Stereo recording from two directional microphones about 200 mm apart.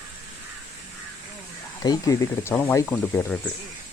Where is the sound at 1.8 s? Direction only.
15° left (ahead or behind).